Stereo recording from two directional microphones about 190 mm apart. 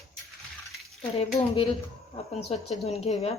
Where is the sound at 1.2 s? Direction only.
35° left (ahead or behind).